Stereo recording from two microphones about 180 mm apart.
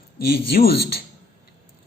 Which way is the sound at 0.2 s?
60° left (ahead or behind).